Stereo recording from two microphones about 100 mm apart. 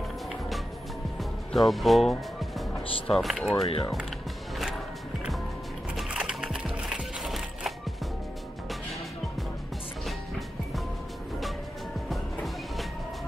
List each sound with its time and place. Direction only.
1.5 s speech: centre (ahead or behind)
6.0 s wood: 10° right (ahead or behind)